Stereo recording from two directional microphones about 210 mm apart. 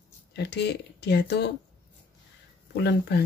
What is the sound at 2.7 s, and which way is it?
Speech, 50° left (ahead or behind).